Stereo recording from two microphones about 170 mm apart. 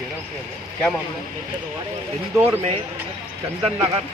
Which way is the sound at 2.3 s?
10° right (ahead or behind).